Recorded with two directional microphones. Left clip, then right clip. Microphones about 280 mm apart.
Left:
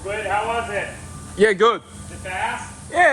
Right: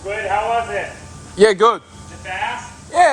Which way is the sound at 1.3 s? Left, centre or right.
Centre.